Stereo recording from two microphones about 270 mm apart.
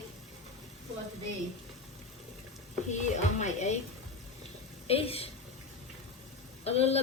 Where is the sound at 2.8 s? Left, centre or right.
Left.